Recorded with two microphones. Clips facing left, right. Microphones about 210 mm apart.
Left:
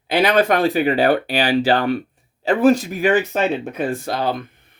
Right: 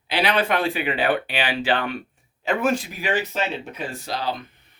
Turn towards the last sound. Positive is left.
turn(degrees=50)  # may be behind; listen again after turning